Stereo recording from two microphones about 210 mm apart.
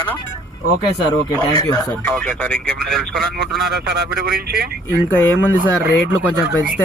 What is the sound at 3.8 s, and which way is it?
Speech, 50° right (ahead or behind).